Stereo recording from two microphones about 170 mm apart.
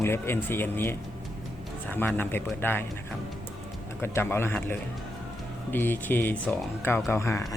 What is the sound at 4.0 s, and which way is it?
A man's voice, 15° left (ahead or behind).